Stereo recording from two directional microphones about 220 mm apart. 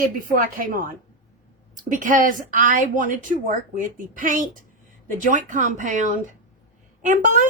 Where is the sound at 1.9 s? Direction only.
35° right (ahead or behind).